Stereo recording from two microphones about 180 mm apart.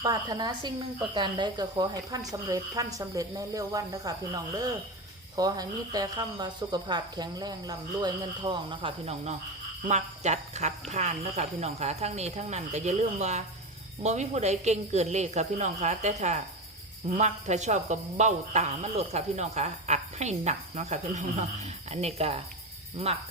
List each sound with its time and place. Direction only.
0.0 s speech: 20° right (ahead or behind)